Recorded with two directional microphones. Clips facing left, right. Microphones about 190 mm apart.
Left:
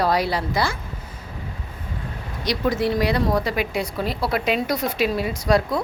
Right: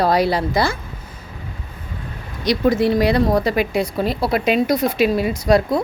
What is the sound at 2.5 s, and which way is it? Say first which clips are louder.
Speech: right 5 dB; 25° right (ahead or behind).